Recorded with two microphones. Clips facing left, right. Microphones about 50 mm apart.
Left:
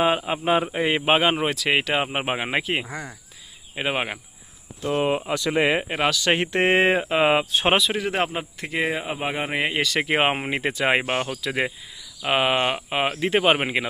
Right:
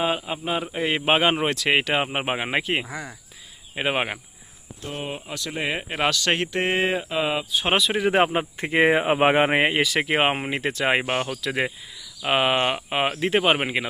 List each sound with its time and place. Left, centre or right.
0.0 s a man's voice: centre
0.7 s speech: centre
4.9 s speech: left
5.9 s speech: centre
6.5 s speech: left
7.7 s speech: centre
7.9 s speech: centre
9.7 s speech: centre